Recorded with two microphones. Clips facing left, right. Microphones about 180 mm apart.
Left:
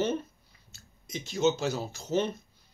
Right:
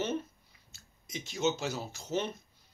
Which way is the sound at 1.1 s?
15° right (ahead or behind).